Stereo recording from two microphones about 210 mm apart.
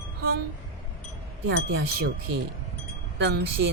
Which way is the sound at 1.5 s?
55° right (ahead or behind).